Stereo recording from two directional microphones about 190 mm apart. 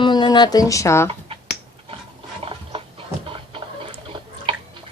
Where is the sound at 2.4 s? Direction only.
30° right (ahead or behind).